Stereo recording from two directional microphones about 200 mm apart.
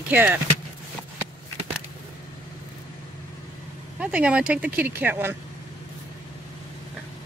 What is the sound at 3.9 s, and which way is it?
Speech, 5° right (ahead or behind).